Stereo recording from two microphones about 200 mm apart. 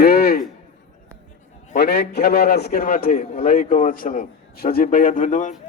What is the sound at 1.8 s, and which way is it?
A man's voice, 55° left (ahead or behind).